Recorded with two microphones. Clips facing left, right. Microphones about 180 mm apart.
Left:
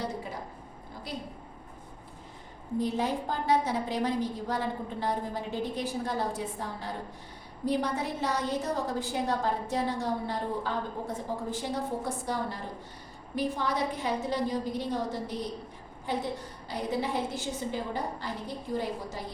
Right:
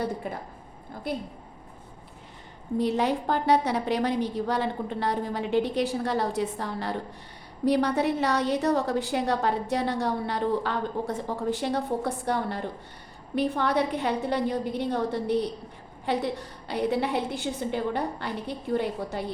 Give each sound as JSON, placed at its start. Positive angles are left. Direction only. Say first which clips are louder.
{"t": 1.1, "sound": "a woman's voice", "louder": "right 8 dB", "side_deg": -55}
{"t": 2.7, "sound": "a woman's voice", "louder": "right 4 dB", "side_deg": -75}